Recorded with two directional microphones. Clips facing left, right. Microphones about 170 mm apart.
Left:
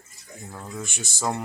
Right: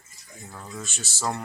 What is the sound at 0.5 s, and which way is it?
Speech, 15° left (ahead or behind).